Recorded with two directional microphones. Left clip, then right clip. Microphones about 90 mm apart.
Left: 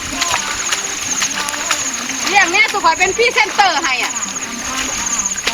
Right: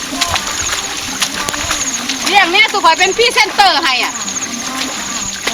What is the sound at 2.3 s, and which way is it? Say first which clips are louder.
Speech: right 2 dB; 75° right (ahead or behind).